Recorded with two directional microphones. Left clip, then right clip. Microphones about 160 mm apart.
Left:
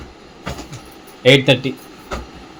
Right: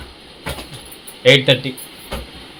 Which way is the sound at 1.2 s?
25° left (ahead or behind).